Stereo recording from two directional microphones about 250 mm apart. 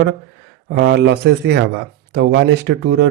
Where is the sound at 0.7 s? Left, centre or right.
Right.